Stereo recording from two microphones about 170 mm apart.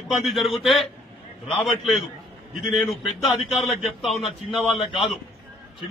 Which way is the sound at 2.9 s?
Centre (ahead or behind).